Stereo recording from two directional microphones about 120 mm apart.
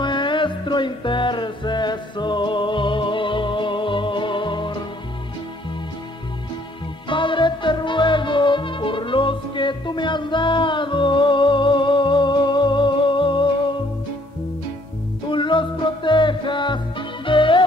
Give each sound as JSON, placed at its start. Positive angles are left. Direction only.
{"t": 0.0, "sound": "music", "side_deg": 40}
{"t": 7.1, "sound": "music", "side_deg": 45}
{"t": 15.2, "sound": "music", "side_deg": 45}